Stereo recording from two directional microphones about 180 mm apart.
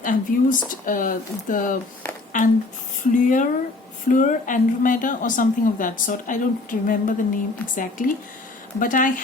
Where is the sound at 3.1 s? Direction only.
45° left (ahead or behind).